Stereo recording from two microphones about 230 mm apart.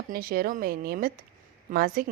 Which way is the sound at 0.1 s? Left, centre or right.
Right.